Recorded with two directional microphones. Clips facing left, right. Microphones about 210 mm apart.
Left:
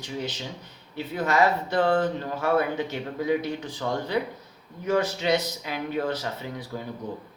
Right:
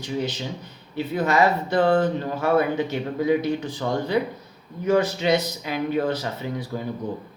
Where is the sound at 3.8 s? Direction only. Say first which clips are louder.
Right 3 dB; 20° right (ahead or behind).